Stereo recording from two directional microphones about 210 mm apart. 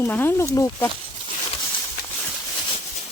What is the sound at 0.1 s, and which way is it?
Speech, 10° left (ahead or behind).